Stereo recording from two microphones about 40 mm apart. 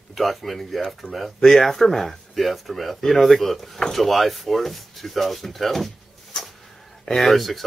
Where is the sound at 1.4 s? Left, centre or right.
Centre.